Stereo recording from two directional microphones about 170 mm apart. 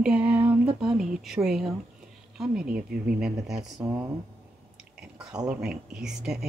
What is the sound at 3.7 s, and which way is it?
Speech, 15° right (ahead or behind).